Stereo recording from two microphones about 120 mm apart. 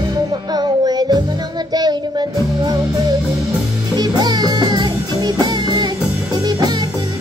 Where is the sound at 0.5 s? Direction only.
35° right (ahead or behind).